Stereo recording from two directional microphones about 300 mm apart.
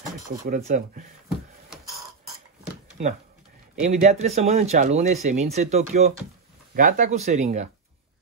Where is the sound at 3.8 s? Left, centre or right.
Right.